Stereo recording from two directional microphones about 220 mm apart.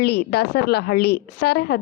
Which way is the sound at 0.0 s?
45° left (ahead or behind).